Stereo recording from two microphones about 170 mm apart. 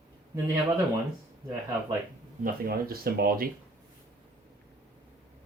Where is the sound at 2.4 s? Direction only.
60° right (ahead or behind).